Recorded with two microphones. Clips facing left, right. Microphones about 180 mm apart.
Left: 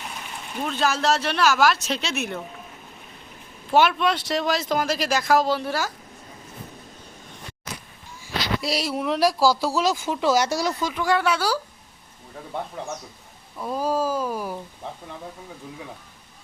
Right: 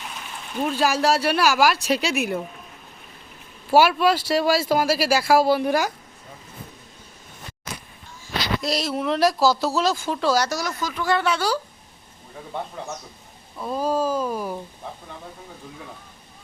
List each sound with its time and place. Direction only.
0.6 s speech: 10° right (ahead or behind)
3.7 s speech: 5° right (ahead or behind)
8.6 s speech: 10° left (ahead or behind); by 10.9 s 30° left (ahead or behind)
10.9 s speech: 10° left (ahead or behind)
13.6 s speech: 10° left (ahead or behind)